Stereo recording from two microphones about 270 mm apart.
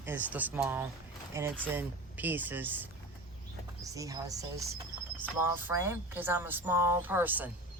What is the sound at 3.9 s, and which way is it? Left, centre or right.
Speech, centre.